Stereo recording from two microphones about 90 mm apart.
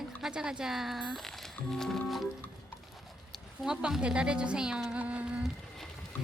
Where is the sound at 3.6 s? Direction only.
10° right (ahead or behind).